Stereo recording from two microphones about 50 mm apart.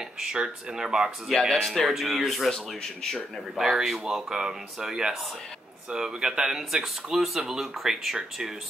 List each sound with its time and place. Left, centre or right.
0.3 s speech: centre
1.5 s speech: centre
3.5 s speech: centre